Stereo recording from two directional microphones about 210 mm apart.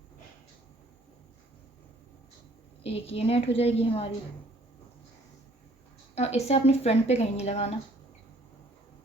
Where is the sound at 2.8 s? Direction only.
30° left (ahead or behind).